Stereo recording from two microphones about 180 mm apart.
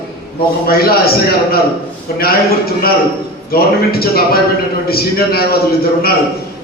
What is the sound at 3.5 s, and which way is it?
A man's voice, 60° left (ahead or behind).